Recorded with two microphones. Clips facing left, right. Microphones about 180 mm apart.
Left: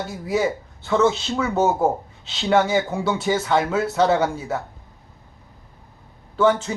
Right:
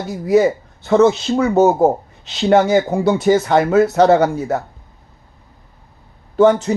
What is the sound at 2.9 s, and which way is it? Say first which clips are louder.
Speech: right 8 dB; 40° right (ahead or behind).